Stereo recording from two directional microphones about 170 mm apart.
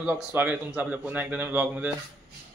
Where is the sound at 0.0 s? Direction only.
10° right (ahead or behind).